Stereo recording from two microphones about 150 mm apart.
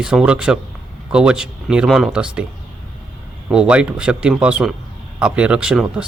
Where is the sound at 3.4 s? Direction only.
5° right (ahead or behind).